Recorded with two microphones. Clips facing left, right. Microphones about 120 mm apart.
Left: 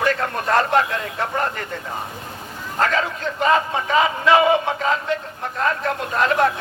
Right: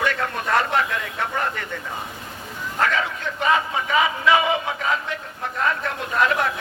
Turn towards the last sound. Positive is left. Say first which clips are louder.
# left 3 dB
turn(degrees=35)  # may be behind; listen again after turning